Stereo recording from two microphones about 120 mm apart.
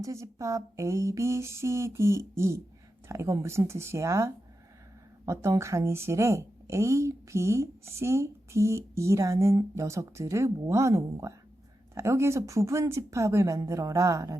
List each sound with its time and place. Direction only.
0.0 s speech: 25° right (ahead or behind)